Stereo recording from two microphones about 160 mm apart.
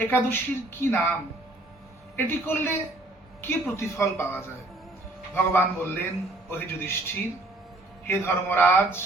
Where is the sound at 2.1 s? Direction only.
15° left (ahead or behind).